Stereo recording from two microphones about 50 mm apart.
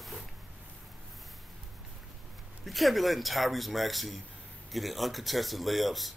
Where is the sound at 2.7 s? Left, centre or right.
Centre.